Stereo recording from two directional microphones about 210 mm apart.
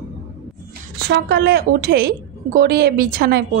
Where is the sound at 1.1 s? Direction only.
55° right (ahead or behind).